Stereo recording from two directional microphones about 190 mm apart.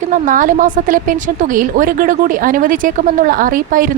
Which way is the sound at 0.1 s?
45° right (ahead or behind).